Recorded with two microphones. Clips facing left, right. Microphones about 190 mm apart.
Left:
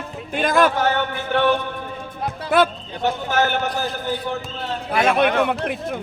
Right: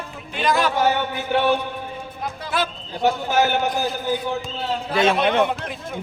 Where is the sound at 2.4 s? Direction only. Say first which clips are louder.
Left 8 dB; 60° left (ahead or behind).